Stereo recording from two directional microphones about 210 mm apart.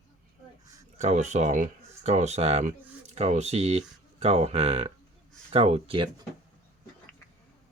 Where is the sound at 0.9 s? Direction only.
35° right (ahead or behind).